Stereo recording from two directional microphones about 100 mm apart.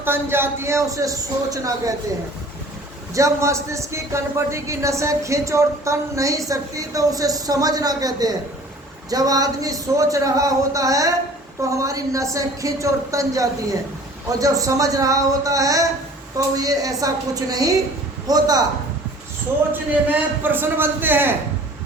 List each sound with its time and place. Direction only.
0.0 s a man's voice: 25° right (ahead or behind)
3.2 s a man's voice: 30° right (ahead or behind)
19.7 s a man's voice: 20° right (ahead or behind)